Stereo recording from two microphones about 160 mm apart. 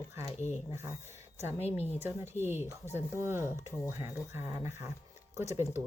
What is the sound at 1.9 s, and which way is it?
Speech, 15° right (ahead or behind).